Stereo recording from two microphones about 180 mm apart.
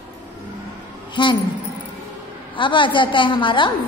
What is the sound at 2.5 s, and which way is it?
A woman's voice, 25° left (ahead or behind).